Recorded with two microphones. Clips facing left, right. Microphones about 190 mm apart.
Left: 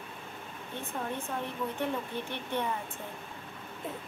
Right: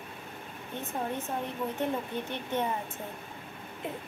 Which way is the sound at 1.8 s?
15° right (ahead or behind).